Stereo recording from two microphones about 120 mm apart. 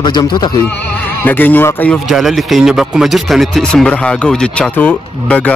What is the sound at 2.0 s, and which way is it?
Speech, centre (ahead or behind).